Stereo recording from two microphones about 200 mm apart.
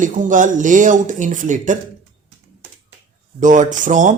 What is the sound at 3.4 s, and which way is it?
Speech, 40° right (ahead or behind).